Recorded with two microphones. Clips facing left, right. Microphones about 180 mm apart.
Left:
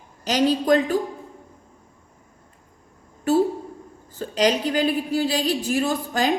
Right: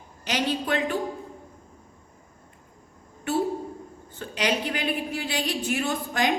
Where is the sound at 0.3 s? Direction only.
40° left (ahead or behind).